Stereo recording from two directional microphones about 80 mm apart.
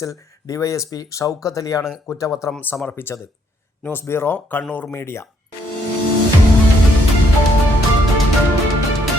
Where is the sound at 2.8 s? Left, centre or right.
Left.